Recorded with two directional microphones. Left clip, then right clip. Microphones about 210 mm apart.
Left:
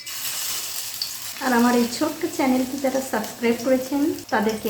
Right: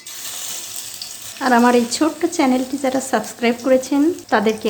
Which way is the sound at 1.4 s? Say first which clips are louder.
Right 6 dB; 50° right (ahead or behind).